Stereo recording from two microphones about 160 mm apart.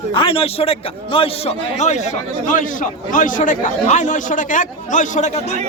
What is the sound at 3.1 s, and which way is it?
Speech, 55° left (ahead or behind).